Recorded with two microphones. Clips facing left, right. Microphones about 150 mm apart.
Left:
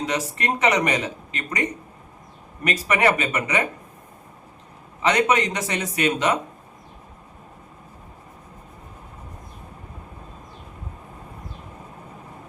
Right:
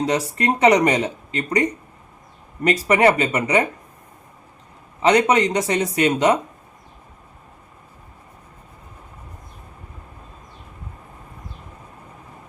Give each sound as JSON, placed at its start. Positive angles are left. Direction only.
{"t": 0.0, "sound": "speech", "side_deg": -35}
{"t": 5.0, "sound": "speech", "side_deg": -35}